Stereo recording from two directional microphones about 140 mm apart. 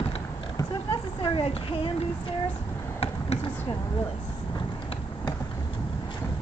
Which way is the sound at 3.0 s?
45° left (ahead or behind).